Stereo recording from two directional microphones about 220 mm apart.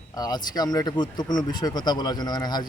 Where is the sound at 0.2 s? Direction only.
20° left (ahead or behind).